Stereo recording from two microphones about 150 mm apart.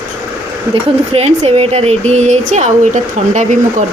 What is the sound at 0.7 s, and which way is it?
Speech, 40° right (ahead or behind).